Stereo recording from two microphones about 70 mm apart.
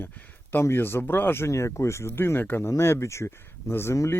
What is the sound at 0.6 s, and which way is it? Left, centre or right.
Speech, left.